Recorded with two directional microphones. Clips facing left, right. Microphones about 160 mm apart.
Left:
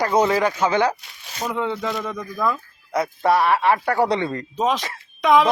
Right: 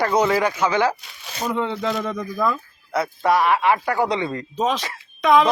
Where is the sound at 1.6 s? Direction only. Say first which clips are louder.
Right 1 dB; 5° left (ahead or behind).